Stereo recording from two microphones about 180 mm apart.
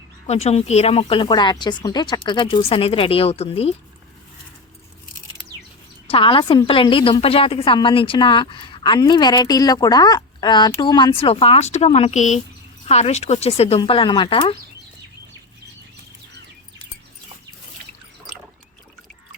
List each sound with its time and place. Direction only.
0.3 s speech: 35° left (ahead or behind)
6.1 s a woman's voice: 30° left (ahead or behind)